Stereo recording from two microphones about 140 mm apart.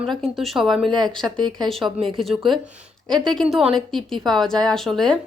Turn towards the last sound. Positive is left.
turn(degrees=5)  # may be behind; listen again after turning